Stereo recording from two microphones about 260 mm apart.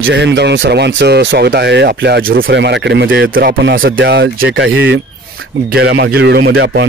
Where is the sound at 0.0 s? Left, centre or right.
Right.